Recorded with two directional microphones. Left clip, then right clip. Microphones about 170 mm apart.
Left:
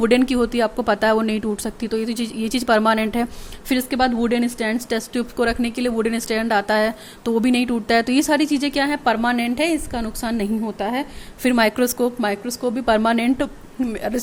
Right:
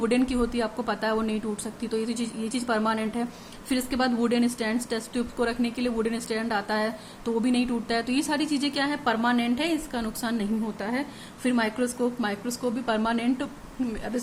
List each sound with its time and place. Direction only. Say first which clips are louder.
0.0 s a woman's voice: left 8 dB; 40° left (ahead or behind)